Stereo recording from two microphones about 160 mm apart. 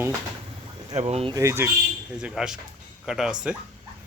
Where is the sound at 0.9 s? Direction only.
40° right (ahead or behind).